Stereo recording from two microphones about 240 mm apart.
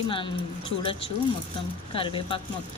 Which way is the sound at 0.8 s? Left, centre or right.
Left.